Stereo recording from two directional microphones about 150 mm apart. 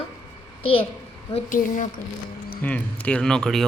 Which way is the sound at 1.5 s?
60° left (ahead or behind).